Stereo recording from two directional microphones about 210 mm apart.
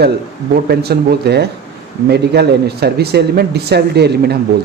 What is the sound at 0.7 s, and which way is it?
Speech, 50° right (ahead or behind).